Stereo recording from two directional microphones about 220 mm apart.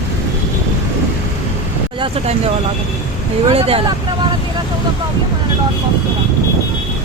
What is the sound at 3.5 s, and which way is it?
Speech, 25° right (ahead or behind).